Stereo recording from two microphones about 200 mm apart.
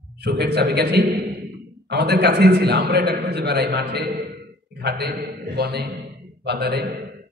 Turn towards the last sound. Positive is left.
turn(degrees=-55)  # may be behind; listen again after turning